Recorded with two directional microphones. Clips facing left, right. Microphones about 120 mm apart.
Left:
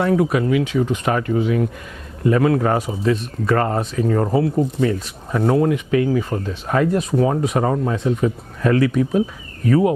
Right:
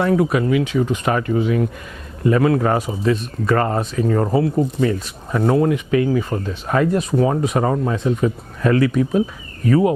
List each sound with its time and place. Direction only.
0.0 s speech: 15° right (ahead or behind)